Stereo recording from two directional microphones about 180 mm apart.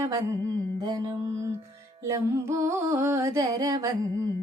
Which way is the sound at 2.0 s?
15° right (ahead or behind).